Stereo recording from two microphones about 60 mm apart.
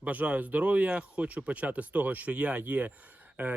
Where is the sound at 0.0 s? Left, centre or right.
Right.